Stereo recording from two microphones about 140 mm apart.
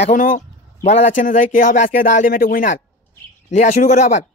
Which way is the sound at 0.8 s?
50° left (ahead or behind).